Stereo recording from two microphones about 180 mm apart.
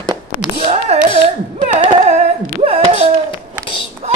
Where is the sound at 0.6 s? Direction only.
35° right (ahead or behind).